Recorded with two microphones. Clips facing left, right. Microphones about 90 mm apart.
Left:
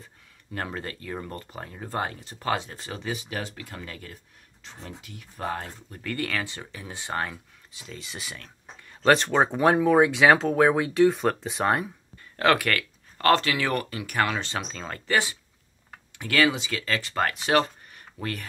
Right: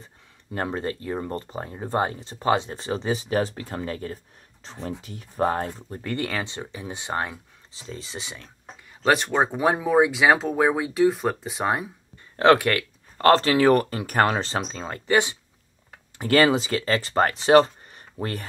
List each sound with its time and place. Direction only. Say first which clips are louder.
0.5 s speech: right 6 dB; 25° right (ahead or behind)
7.7 s speech: right 4 dB; 30° right (ahead or behind)
9.0 s speech: left 1 dB; 10° right (ahead or behind)
12.4 s speech: right 5 dB; 25° right (ahead or behind)
13.3 s speech: right 6 dB; 35° right (ahead or behind); by 15.3 s 20° right (ahead or behind)
16.2 s speech: right 5 dB; 35° right (ahead or behind)